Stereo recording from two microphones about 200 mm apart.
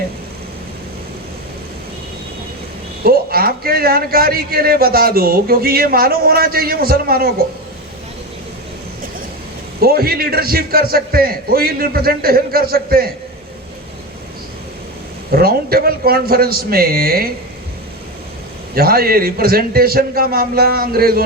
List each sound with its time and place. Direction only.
3.0 s a man's voice: 50° right (ahead or behind)
9.8 s a man's voice: 50° right (ahead or behind)
15.3 s a man's voice: 50° right (ahead or behind)
18.7 s a man's voice: 50° right (ahead or behind)